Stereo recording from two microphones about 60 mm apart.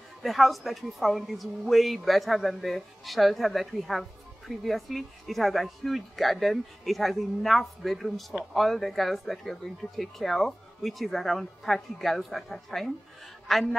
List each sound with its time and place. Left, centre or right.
0.2 s speech: centre